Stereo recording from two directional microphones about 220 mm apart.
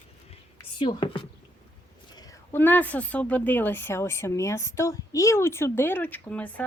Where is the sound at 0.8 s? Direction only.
20° left (ahead or behind).